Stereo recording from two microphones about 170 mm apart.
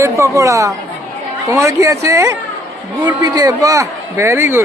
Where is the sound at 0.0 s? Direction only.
20° right (ahead or behind).